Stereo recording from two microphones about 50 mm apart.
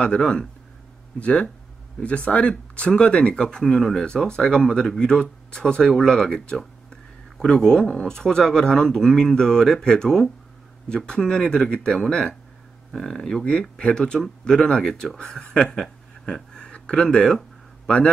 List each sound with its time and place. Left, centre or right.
0.0 s speech: centre
2.0 s speech: left
3.4 s speech: centre
12.9 s speech: centre
16.5 s a sound: centre